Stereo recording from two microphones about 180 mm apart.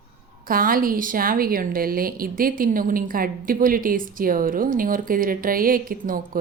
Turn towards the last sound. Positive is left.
turn(degrees=-50)  # may be behind; listen again after turning